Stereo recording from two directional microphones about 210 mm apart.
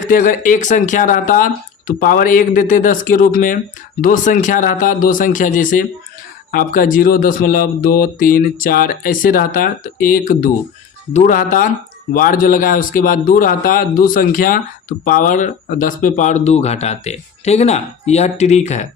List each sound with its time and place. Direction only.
0.1 s a man's voice: 40° left (ahead or behind)